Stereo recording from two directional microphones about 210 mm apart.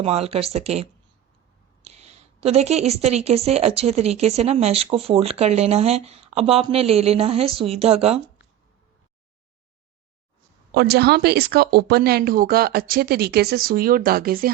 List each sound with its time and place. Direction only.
0.0 s a woman's voice: 30° right (ahead or behind)
10.8 s speech: 50° right (ahead or behind)